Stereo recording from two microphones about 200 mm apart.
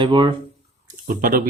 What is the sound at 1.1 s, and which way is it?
Speech, 45° right (ahead or behind).